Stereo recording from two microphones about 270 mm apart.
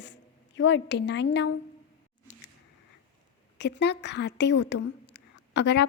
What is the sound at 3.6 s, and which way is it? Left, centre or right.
A woman's voice, left.